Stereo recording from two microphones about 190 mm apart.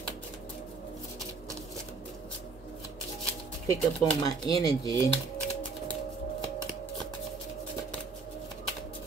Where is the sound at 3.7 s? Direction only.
20° left (ahead or behind).